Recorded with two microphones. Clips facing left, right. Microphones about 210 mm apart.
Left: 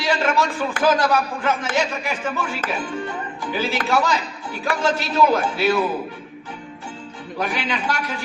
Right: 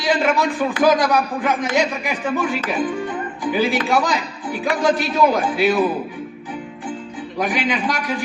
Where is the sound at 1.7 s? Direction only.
15° right (ahead or behind).